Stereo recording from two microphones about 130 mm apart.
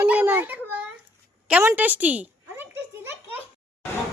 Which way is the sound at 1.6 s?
15° right (ahead or behind).